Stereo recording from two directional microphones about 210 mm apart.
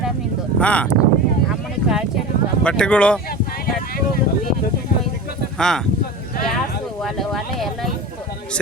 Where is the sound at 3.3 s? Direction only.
45° left (ahead or behind).